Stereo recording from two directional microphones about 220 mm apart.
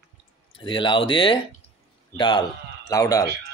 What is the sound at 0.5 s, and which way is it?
Speech, 20° left (ahead or behind).